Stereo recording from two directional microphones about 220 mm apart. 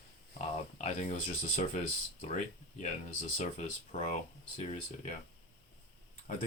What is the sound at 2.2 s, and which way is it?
Speech, 30° left (ahead or behind).